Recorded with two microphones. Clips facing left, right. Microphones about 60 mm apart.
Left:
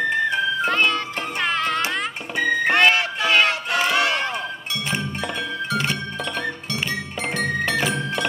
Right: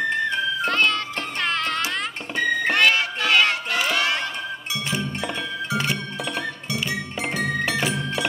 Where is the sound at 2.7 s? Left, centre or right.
Left.